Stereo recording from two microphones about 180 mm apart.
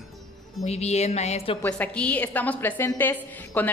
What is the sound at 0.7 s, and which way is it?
Music, 35° left (ahead or behind).